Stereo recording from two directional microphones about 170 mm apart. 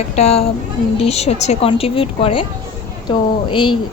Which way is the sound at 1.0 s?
40° left (ahead or behind).